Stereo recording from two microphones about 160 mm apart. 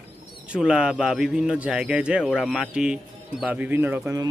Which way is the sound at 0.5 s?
5° right (ahead or behind).